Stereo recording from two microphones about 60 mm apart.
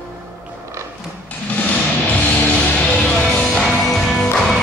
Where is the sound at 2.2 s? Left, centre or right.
Left.